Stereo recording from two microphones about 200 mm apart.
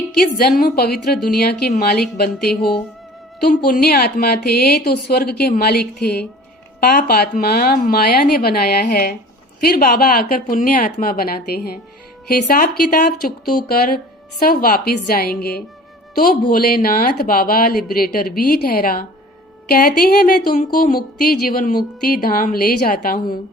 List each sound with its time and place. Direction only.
0.3 s speech: 50° left (ahead or behind)
3.5 s speech: 45° left (ahead or behind)